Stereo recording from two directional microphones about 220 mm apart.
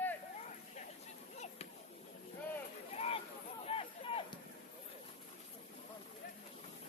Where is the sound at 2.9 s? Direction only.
30° left (ahead or behind).